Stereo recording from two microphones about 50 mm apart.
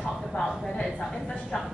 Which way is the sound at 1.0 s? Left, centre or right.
Centre.